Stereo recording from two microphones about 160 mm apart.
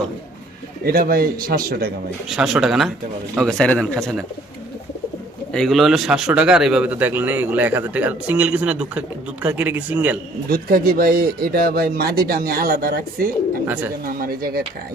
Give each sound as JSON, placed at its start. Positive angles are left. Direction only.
{"t": 0.9, "sound": "speech", "side_deg": -65}
{"t": 2.3, "sound": "speech", "side_deg": -5}
{"t": 5.5, "sound": "a man's voice", "side_deg": 5}
{"t": 10.5, "sound": "speech", "side_deg": -70}